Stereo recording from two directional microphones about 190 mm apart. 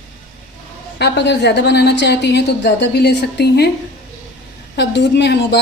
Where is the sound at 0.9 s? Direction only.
60° left (ahead or behind).